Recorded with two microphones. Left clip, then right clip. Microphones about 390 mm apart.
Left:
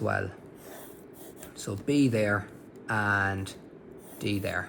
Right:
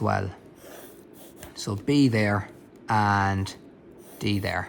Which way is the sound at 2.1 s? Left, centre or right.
Right.